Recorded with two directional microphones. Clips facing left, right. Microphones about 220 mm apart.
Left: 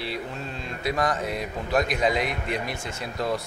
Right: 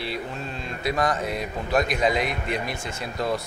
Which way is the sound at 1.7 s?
20° right (ahead or behind).